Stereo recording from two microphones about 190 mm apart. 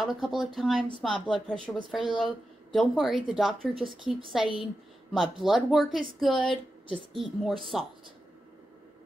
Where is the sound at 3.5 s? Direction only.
30° right (ahead or behind).